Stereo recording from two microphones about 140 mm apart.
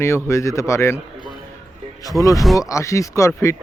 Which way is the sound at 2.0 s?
25° left (ahead or behind).